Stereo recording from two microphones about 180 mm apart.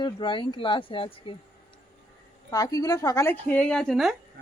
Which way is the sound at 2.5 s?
20° left (ahead or behind).